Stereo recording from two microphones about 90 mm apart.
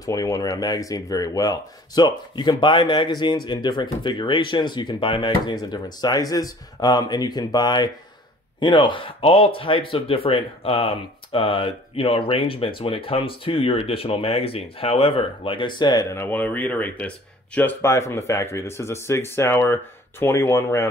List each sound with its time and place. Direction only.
0.0 s speech: 40° left (ahead or behind); by 5.6 s 65° left (ahead or behind)
5.6 s speech: 50° left (ahead or behind)
16.1 s speech: 25° left (ahead or behind)